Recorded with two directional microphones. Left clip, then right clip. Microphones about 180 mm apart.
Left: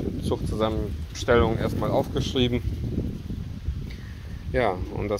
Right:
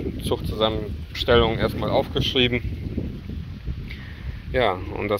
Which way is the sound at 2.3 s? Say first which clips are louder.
Right 4 dB; centre (ahead or behind).